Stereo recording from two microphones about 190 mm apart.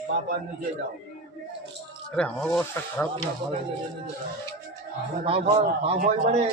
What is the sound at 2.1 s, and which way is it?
Speech, 5° left (ahead or behind).